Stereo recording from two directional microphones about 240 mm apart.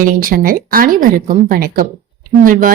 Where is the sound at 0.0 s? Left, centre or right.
Right.